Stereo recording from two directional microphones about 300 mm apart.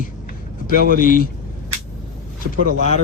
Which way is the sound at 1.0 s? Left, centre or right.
Left.